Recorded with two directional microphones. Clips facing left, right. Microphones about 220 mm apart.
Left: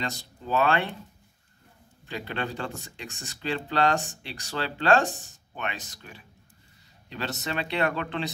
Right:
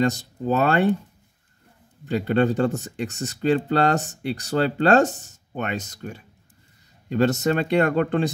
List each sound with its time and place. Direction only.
0.0 s speech: 45° right (ahead or behind)
2.0 s speech: 45° right (ahead or behind)